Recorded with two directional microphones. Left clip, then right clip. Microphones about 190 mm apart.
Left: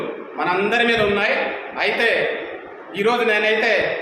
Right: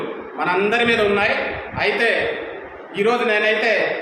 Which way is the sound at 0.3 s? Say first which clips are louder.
Even; 10° left (ahead or behind).